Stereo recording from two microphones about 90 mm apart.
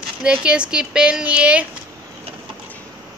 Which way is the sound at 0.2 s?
10° right (ahead or behind).